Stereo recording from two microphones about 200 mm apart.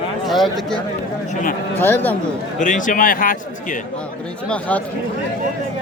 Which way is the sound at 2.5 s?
40° left (ahead or behind).